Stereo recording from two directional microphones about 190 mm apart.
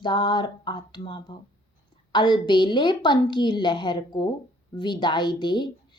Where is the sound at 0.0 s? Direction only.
25° left (ahead or behind).